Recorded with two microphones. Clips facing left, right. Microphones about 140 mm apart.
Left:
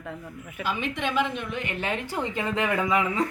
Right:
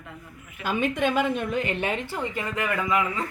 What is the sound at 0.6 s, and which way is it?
A woman's voice, 45° right (ahead or behind).